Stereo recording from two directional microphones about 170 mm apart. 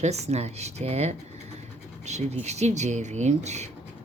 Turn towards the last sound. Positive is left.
turn(degrees=-40)  # may be behind; listen again after turning